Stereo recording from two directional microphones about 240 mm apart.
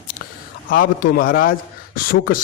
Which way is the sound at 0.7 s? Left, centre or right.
Left.